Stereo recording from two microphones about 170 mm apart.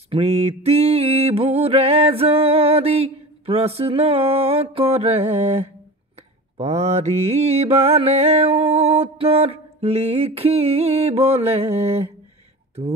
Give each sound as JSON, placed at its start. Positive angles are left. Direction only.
{"t": 0.1, "sound": "mantra", "side_deg": -40}